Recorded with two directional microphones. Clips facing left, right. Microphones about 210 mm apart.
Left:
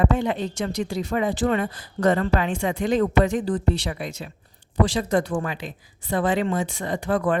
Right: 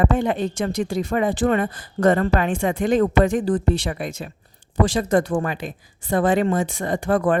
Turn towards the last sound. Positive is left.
turn(degrees=-50)  # may be behind; listen again after turning